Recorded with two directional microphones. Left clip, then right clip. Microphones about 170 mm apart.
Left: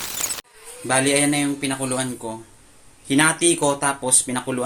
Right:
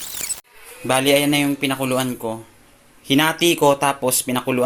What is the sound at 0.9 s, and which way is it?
Speech, 20° right (ahead or behind).